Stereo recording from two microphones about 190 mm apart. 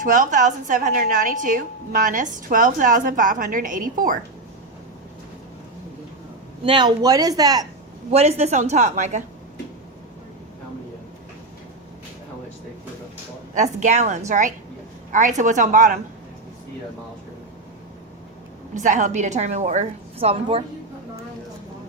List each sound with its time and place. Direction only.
0.0 s a woman's voice: 45° right (ahead or behind)
6.7 s speech: 25° right (ahead or behind)
8.1 s a woman's voice: 35° right (ahead or behind)
13.5 s a woman's voice: 40° right (ahead or behind)
18.7 s a woman's voice: 40° right (ahead or behind)